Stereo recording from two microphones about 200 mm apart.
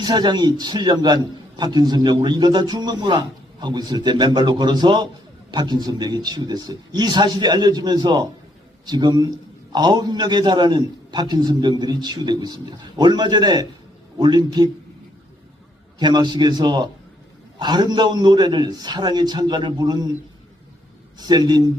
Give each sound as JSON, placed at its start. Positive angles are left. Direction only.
{"t": 0.0, "sound": "a man's voice", "side_deg": -20}
{"t": 16.0, "sound": "a man's voice", "side_deg": -20}
{"t": 21.2, "sound": "a man's voice", "side_deg": -20}